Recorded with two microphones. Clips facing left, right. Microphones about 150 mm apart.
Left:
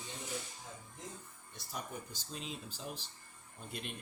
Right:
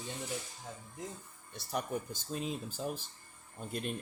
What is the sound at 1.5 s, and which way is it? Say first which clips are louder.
Speech: right 8 dB; 65° right (ahead or behind).